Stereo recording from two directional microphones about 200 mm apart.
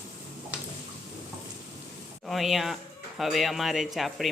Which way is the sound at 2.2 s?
Centre (ahead or behind).